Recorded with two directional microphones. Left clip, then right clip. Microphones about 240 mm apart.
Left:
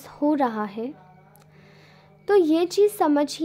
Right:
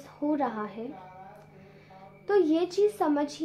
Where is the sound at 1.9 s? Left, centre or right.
Left.